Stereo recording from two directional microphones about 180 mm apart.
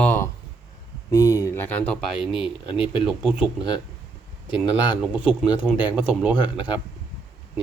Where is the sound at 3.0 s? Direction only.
5° right (ahead or behind).